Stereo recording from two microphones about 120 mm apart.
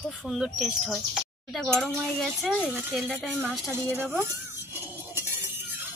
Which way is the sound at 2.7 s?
15° right (ahead or behind).